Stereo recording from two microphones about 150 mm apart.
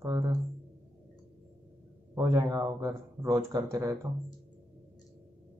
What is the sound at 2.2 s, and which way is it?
Speech, 25° right (ahead or behind).